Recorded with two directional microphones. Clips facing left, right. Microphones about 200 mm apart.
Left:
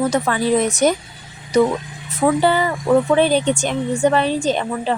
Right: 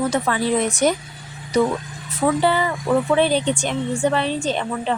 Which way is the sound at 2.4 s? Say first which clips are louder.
Left 2 dB; 40° left (ahead or behind).